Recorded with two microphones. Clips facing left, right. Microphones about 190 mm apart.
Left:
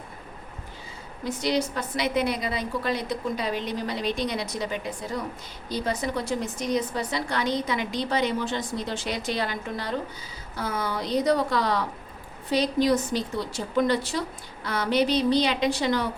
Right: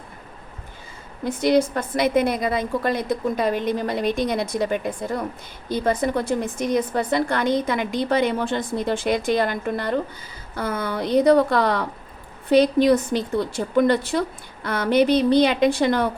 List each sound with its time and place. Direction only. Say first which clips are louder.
1.2 s a woman's voice: right 7 dB; 55° right (ahead or behind)